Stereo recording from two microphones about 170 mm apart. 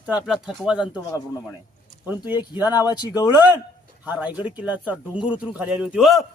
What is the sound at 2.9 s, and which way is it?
Speech, 25° left (ahead or behind).